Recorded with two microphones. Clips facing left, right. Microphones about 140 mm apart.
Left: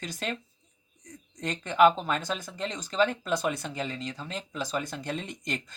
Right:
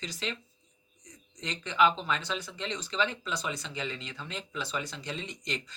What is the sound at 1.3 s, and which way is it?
Speech, 50° left (ahead or behind).